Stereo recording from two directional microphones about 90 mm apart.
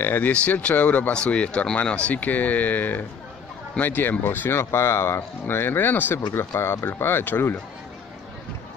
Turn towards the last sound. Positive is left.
turn(degrees=20)  # may be behind; listen again after turning